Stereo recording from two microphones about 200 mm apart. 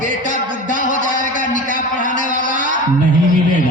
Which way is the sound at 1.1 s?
40° right (ahead or behind).